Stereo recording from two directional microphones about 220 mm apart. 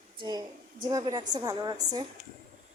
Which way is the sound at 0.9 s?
15° right (ahead or behind).